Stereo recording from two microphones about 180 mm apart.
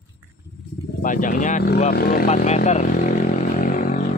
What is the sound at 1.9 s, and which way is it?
Speech, 55° left (ahead or behind).